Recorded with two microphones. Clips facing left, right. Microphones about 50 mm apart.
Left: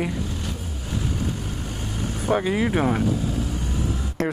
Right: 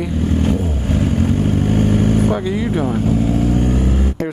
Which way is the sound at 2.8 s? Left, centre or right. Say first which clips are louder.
Right 3 dB; left.